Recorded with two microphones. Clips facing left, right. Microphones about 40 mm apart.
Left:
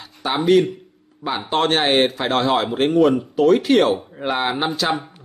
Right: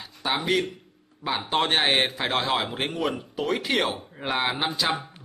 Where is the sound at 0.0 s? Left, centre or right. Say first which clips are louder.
Left 7 dB; centre.